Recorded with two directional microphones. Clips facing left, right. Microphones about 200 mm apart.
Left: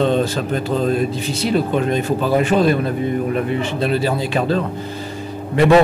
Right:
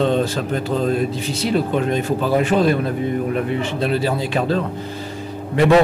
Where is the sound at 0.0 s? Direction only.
15° left (ahead or behind).